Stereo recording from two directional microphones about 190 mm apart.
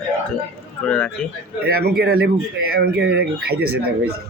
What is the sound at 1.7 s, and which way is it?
Speech, 55° right (ahead or behind).